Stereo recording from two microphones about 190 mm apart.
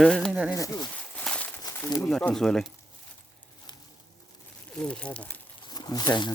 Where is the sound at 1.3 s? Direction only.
5° left (ahead or behind).